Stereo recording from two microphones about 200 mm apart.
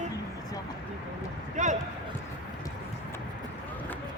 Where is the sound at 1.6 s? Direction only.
35° right (ahead or behind).